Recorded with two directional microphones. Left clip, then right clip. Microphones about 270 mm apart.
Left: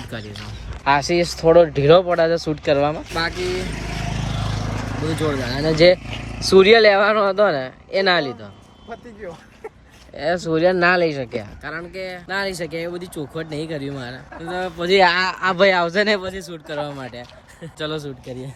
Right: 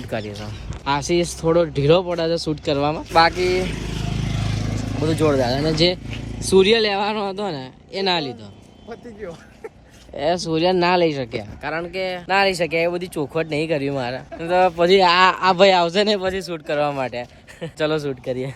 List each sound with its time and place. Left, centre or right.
0.0 s speech: centre
3.3 s speech: centre
3.6 s vehicle: centre
6.2 s speech: centre
10.2 s speech: centre
11.6 s speech: centre
11.9 s speech: centre
12.3 s speech: centre